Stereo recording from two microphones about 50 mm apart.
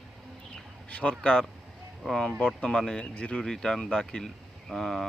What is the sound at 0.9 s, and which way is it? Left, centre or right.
Speech, left.